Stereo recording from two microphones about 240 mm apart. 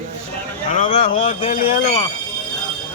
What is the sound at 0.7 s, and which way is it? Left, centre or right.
Speech, left.